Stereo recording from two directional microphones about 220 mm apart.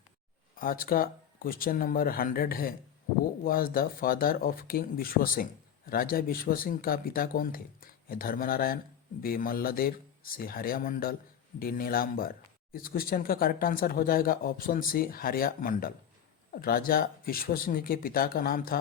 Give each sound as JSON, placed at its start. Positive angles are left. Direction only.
{"t": 0.5, "sound": "speech", "side_deg": 40}